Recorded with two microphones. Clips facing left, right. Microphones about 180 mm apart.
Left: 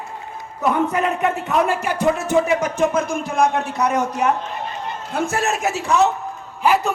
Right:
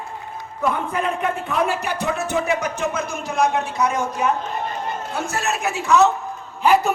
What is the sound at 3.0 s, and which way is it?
A man's voice, 55° left (ahead or behind).